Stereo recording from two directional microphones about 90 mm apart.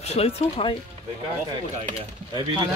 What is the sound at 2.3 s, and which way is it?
Speech, 50° right (ahead or behind).